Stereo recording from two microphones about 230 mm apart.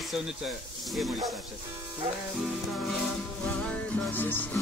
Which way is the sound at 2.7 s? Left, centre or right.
Centre.